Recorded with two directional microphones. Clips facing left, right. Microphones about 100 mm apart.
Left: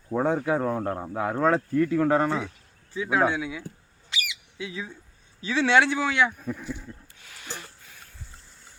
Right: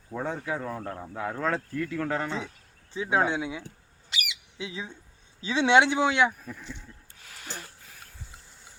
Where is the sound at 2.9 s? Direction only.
25° right (ahead or behind).